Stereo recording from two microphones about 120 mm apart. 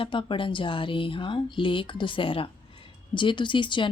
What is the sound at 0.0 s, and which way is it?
Speech, 45° left (ahead or behind).